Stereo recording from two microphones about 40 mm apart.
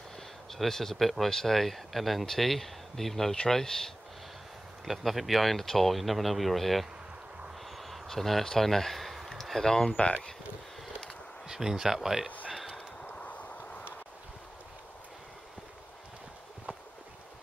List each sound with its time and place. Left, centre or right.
0.5 s speech: centre
4.8 s speech: centre
7.7 s a sound: centre
9.7 s speech: centre
9.9 s speech: left
11.4 s speech: centre
12.5 s a sound: centre
13.2 s vehicle: left